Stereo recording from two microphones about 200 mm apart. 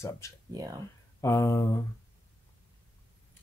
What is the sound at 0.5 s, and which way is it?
Speech, 15° right (ahead or behind).